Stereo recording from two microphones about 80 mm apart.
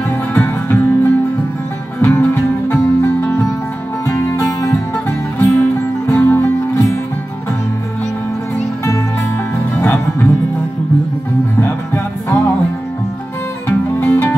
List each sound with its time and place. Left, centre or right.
0.3 s music: left
5.4 s music: left
9.8 s music: left
11.6 s music: left
13.7 s music: left